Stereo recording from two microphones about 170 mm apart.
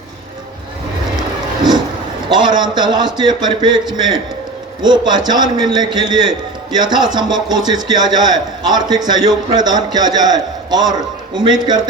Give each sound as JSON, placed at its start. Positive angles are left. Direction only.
{"t": 2.6, "sound": "a man's voice", "side_deg": -25}